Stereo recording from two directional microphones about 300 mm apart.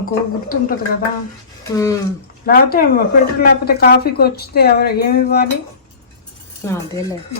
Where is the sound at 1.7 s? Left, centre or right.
Centre.